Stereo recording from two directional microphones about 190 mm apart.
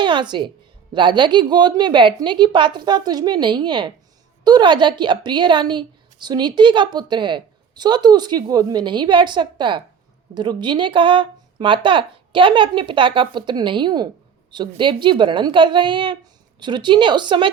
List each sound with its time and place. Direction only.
0.0 s a woman's voice: 25° right (ahead or behind)